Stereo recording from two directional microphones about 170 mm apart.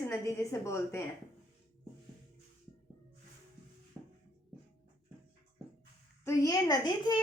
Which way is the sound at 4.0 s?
20° right (ahead or behind).